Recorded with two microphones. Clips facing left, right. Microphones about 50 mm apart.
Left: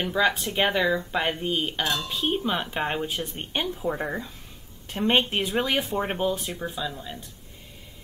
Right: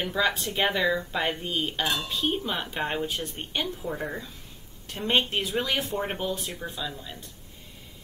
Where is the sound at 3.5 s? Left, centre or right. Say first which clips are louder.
Left 4 dB; left.